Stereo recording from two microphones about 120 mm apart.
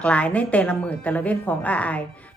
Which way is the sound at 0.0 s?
10° left (ahead or behind).